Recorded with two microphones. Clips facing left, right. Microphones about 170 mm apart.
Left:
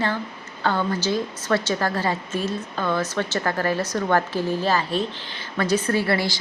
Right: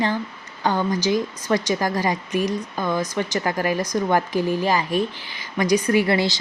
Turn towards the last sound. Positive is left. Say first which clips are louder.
# right 3 dB
turn(degrees=-20)  # may be behind; listen again after turning